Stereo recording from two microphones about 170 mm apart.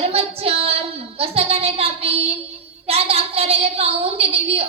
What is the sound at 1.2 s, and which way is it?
Child singing, 35° right (ahead or behind).